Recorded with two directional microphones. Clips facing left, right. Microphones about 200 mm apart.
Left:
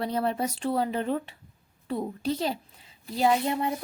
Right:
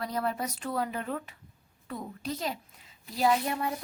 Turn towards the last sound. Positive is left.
turn(degrees=25)  # may be behind; listen again after turning